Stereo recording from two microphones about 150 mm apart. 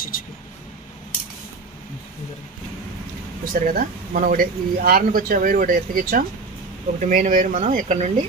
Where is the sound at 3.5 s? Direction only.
65° right (ahead or behind).